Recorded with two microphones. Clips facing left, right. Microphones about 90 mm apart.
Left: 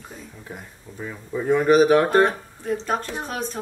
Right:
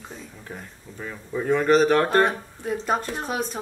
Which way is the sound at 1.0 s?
10° left (ahead or behind).